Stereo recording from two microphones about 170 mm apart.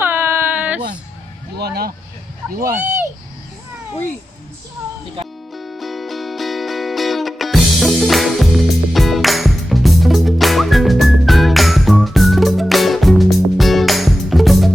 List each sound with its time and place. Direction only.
0.0 s a sound: 15° right (ahead or behind)
1.5 s speech: 65° right (ahead or behind)
5.5 s music: centre (ahead or behind)